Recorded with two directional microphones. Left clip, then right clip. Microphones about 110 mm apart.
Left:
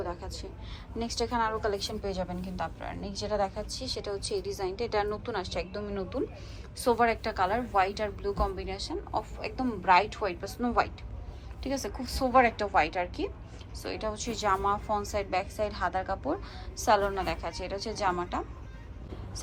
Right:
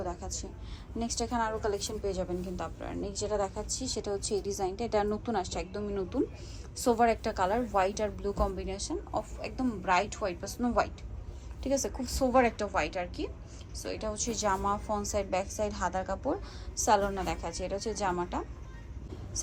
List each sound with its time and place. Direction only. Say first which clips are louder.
0.0 s a sound: left 1 dB; 20° right (ahead or behind)
0.9 s a woman's voice: left 2 dB; 25° right (ahead or behind)
9.4 s a woman's voice: left 2 dB; 20° right (ahead or behind)